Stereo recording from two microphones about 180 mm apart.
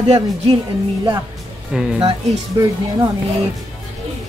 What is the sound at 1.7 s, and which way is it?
Speech, 5° right (ahead or behind).